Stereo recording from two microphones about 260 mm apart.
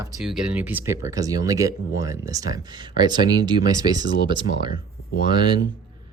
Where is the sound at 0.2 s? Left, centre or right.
Centre.